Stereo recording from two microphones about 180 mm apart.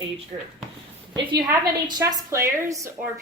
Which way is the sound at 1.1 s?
20° right (ahead or behind).